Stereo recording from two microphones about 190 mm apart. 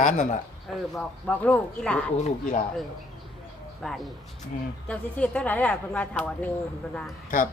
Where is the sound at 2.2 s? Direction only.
40° left (ahead or behind).